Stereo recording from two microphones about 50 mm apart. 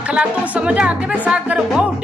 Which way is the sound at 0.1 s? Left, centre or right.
Right.